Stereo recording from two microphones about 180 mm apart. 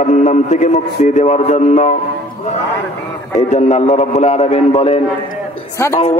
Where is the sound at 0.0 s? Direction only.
40° left (ahead or behind).